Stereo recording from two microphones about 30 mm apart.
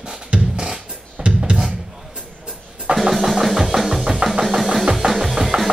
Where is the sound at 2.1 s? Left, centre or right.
Right.